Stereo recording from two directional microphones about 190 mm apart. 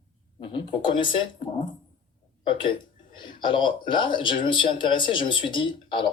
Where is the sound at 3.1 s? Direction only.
25° left (ahead or behind).